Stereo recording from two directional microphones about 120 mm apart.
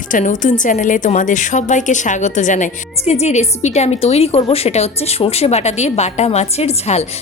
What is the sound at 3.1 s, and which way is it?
A woman's voice, 65° left (ahead or behind).